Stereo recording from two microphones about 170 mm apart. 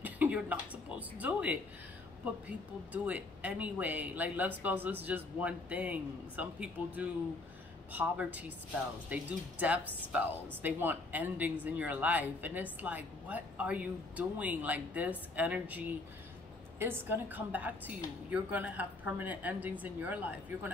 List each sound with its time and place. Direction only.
0.0 s speech: 10° right (ahead or behind)
2.9 s speech: 10° right (ahead or behind)